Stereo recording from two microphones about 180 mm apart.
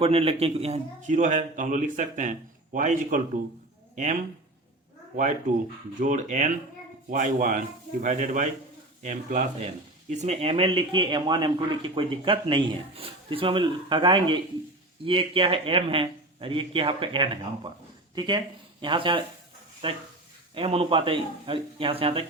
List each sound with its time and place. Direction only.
0.0 s a man's voice: 35° right (ahead or behind)
6.0 s a man's voice: 45° right (ahead or behind)